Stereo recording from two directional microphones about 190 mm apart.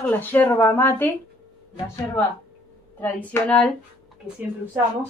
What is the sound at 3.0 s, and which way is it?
Speech, 10° left (ahead or behind).